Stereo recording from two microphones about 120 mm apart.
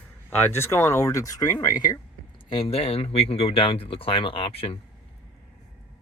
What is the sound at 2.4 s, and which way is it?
Speech, 50° left (ahead or behind).